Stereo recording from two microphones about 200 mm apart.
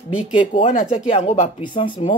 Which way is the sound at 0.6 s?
40° left (ahead or behind).